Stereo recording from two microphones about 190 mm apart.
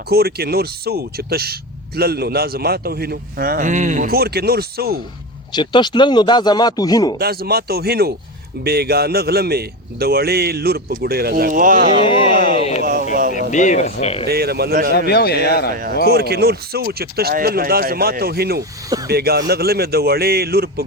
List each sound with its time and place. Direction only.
0.1 s a man's voice: 55° right (ahead or behind)
5.5 s speech: 25° left (ahead or behind)
7.2 s a man's voice: 55° right (ahead or behind)
12.0 s speech: 30° left (ahead or behind)
12.8 s a sound: 45° right (ahead or behind)
13.5 s speech: 40° left (ahead or behind)
14.3 s a man's voice: 55° right (ahead or behind)
14.9 s speech: 55° left (ahead or behind)
15.7 s a man's voice: 50° right (ahead or behind)